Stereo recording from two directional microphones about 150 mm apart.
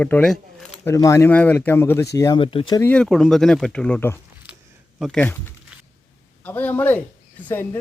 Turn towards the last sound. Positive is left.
turn(degrees=15)  # may be behind; listen again after turning